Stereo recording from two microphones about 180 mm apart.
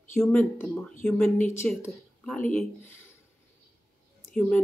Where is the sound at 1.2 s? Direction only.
40° left (ahead or behind).